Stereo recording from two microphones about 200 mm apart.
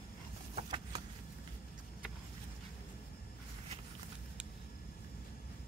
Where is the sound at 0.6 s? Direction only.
25° right (ahead or behind).